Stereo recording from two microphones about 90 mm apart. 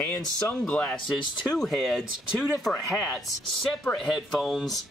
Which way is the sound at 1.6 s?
Centre (ahead or behind).